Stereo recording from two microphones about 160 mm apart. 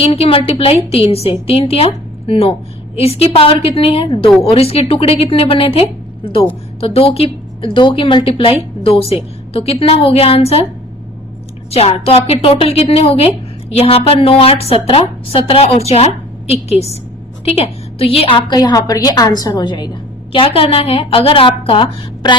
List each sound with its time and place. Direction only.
0.0 s a woman's voice: 35° left (ahead or behind)
11.7 s a woman's voice: 40° left (ahead or behind)